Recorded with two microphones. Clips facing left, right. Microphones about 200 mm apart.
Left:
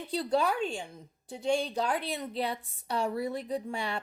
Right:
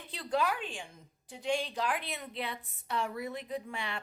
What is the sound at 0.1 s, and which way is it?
Speech, 30° left (ahead or behind).